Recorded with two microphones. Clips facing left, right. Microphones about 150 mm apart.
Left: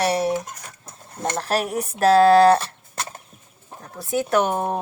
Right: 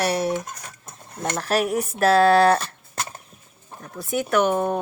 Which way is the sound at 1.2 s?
30° left (ahead or behind).